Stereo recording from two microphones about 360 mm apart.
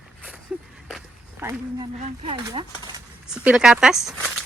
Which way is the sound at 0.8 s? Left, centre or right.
Centre.